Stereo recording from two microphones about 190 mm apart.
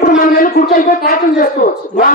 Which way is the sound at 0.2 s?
45° left (ahead or behind).